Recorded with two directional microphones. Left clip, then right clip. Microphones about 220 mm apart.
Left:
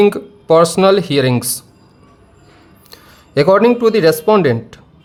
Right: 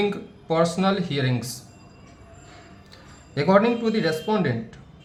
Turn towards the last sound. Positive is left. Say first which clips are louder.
# left 13 dB
turn(degrees=45)  # may be behind; listen again after turning